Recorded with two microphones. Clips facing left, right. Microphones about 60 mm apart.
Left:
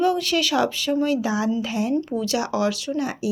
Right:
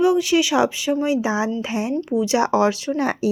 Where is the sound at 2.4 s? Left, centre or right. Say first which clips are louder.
Right 5 dB; right.